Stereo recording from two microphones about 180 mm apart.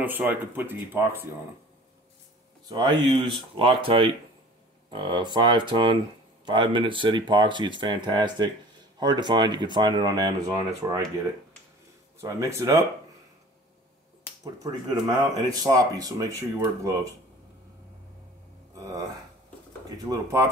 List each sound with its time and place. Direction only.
0.0 s speech: 10° right (ahead or behind)
2.7 s speech: 25° right (ahead or behind)
12.2 s speech: 15° right (ahead or behind)
14.7 s speech: 25° right (ahead or behind)
18.8 s speech: 20° right (ahead or behind)
20.1 s speech: 20° right (ahead or behind)